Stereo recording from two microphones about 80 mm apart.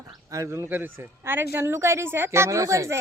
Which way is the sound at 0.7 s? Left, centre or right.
Right.